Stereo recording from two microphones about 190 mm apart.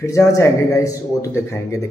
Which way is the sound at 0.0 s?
15° left (ahead or behind).